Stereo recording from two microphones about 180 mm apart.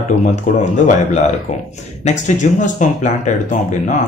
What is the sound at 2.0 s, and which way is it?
Speech, 45° left (ahead or behind).